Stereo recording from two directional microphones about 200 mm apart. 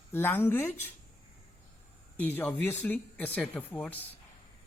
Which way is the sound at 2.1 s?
10° left (ahead or behind).